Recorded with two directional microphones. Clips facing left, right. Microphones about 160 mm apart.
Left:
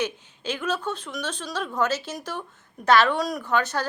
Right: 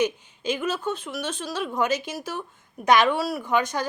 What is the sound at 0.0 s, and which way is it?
Speech, 10° right (ahead or behind).